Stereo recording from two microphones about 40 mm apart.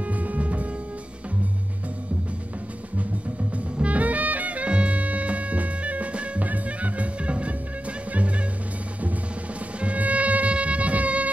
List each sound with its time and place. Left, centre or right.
0.0 s music: right
3.7 s music: right
9.8 s music: right